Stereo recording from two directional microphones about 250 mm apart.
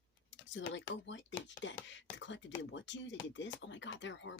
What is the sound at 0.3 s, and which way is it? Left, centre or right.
Speech, left.